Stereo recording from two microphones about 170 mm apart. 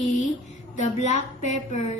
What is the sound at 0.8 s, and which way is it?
A woman's voice, 45° left (ahead or behind).